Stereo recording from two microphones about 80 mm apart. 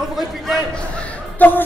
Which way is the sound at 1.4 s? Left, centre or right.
Left.